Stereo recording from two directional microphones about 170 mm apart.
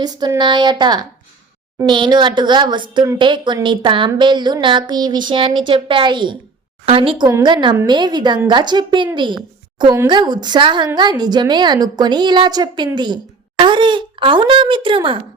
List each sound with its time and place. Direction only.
0.0 s a woman's voice: 25° right (ahead or behind)